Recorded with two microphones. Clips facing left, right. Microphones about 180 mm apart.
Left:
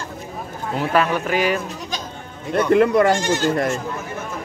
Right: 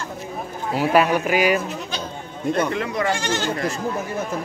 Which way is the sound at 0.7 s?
10° right (ahead or behind).